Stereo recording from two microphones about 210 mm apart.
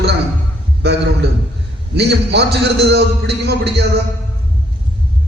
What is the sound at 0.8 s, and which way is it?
A man's voice, 50° right (ahead or behind).